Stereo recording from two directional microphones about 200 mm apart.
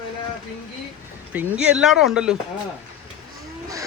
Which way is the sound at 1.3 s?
5° right (ahead or behind).